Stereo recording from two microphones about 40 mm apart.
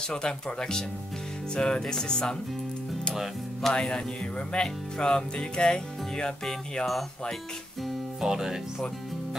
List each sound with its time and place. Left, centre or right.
0.1 s speech: left
3.7 s speech: left
8.2 s speech: centre